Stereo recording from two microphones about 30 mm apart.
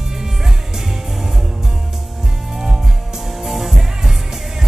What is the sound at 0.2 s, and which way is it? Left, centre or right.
Music, centre.